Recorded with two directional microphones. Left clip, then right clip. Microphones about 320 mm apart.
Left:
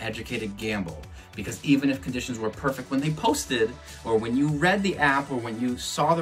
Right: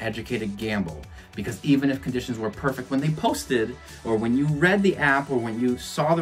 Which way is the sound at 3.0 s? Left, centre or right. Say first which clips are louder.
Left 2 dB; right.